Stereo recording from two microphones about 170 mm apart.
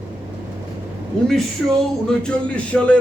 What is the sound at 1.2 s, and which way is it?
Speech, 5° left (ahead or behind).